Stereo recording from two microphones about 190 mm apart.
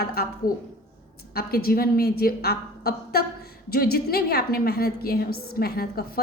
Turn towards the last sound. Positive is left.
turn(degrees=55)  # may be behind; listen again after turning